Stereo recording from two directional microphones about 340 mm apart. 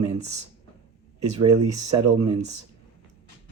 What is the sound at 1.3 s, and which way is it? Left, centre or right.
Speech, right.